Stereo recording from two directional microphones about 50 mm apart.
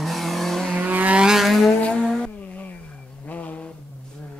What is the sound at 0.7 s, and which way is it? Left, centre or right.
Vehicle, right.